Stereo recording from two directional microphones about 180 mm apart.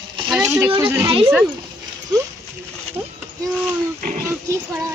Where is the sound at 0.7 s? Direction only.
30° right (ahead or behind).